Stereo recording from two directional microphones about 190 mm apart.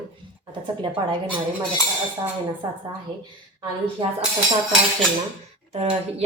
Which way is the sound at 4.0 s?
25° right (ahead or behind).